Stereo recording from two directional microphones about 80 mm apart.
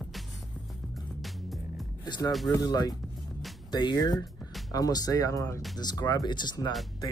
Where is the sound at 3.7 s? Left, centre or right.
Left.